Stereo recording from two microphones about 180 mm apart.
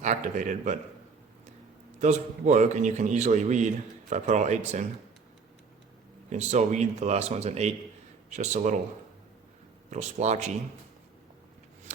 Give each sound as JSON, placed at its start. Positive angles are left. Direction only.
{"t": 0.0, "sound": "a man's voice", "side_deg": -45}
{"t": 2.0, "sound": "a man's voice", "side_deg": -40}
{"t": 6.3, "sound": "a man's voice", "side_deg": -40}
{"t": 9.9, "sound": "a man's voice", "side_deg": -40}